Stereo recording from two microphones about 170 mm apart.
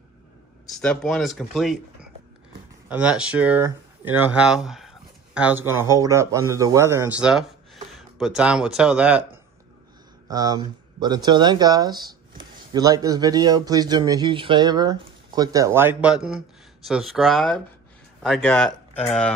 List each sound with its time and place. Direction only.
0.7 s speech: 5° left (ahead or behind)
2.9 s speech: 5° right (ahead or behind)
10.3 s speech: 20° right (ahead or behind); by 19.3 s 5° left (ahead or behind)